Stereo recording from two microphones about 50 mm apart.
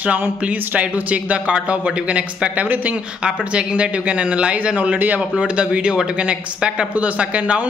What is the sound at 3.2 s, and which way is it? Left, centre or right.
Speech, right.